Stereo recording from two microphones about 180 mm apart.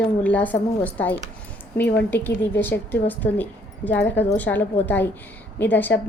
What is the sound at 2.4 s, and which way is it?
A woman's voice, 10° left (ahead or behind).